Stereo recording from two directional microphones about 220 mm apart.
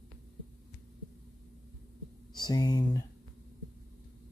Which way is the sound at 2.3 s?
20° left (ahead or behind).